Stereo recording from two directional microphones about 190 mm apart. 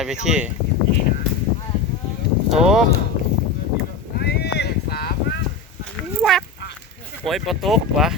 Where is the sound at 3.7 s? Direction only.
60° left (ahead or behind).